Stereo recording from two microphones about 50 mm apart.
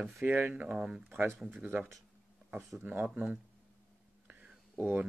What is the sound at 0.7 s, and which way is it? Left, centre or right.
Speech, centre.